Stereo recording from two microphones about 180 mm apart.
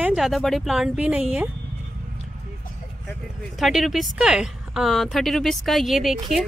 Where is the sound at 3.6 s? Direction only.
Centre (ahead or behind).